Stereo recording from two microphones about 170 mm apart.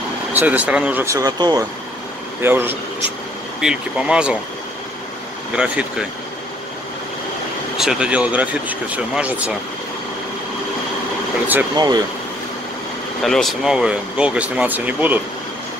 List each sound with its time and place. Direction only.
0.3 s speech: 10° right (ahead or behind)
5.6 s speech: 5° right (ahead or behind)
7.7 s speech: centre (ahead or behind)
11.7 s speech: 25° right (ahead or behind)
13.2 s speech: centre (ahead or behind)